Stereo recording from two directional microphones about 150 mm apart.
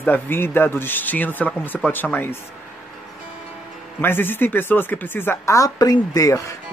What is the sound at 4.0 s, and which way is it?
Speech, 15° left (ahead or behind).